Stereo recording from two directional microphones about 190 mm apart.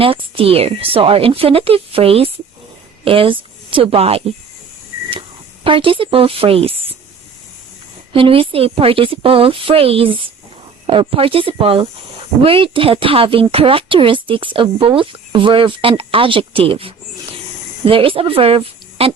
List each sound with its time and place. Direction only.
0.0 s a woman's voice: 30° right (ahead or behind)
5.6 s speech: 30° right (ahead or behind)
8.1 s speech: 30° right (ahead or behind)